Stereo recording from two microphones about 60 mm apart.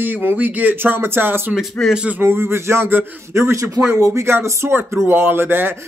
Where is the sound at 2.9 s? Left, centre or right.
Right.